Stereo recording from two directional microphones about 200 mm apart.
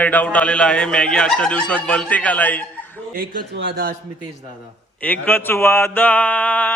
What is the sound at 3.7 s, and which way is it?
Speech, 50° right (ahead or behind).